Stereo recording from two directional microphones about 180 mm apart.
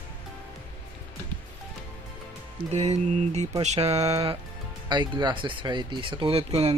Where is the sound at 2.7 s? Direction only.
40° right (ahead or behind).